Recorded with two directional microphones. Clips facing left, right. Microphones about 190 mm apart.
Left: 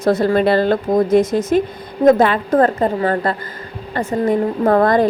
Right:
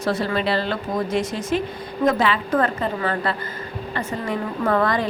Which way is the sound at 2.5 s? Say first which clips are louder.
Left 7 dB; 35° left (ahead or behind).